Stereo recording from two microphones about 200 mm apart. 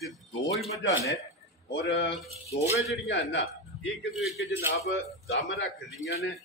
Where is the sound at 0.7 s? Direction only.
15° left (ahead or behind).